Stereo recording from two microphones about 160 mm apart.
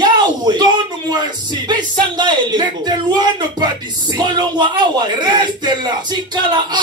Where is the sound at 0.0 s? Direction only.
25° right (ahead or behind).